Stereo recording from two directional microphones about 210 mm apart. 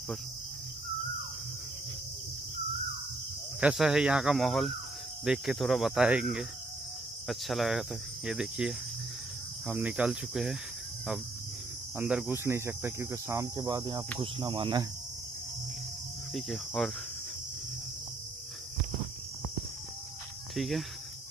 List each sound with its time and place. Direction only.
3.6 s speech: centre (ahead or behind)
12.0 s speech: 5° right (ahead or behind); by 14.9 s 20° right (ahead or behind)
16.3 s speech: centre (ahead or behind)
20.5 s cricket: centre (ahead or behind)